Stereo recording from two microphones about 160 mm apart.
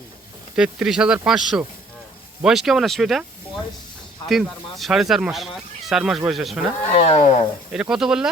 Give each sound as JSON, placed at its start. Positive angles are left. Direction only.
{"t": 0.5, "sound": "speech", "side_deg": -5}
{"t": 6.9, "sound": "speech", "side_deg": 40}
{"t": 7.7, "sound": "speech", "side_deg": -5}